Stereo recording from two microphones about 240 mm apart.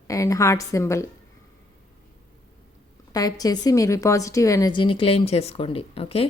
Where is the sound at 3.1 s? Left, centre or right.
Centre.